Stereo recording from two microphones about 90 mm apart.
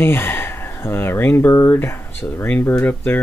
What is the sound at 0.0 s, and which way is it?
Speech, 25° left (ahead or behind).